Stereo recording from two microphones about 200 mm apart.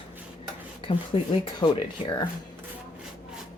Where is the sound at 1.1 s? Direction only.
30° left (ahead or behind).